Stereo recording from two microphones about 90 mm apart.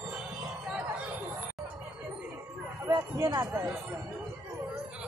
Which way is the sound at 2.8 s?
25° right (ahead or behind).